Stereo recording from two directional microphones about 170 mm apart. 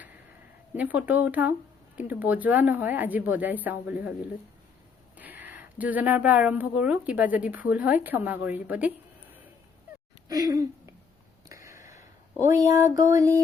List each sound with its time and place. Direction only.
0.8 s a woman's voice: 10° right (ahead or behind)
5.1 s a woman's voice: 10° right (ahead or behind)
10.2 s a sound: 20° right (ahead or behind)